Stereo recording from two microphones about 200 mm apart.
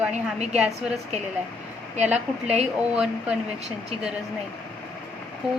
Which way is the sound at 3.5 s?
35° right (ahead or behind).